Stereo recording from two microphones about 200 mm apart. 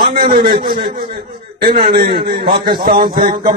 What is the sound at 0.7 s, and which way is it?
A man's voice, 45° right (ahead or behind).